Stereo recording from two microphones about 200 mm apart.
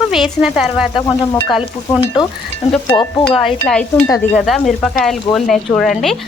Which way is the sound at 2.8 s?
20° left (ahead or behind).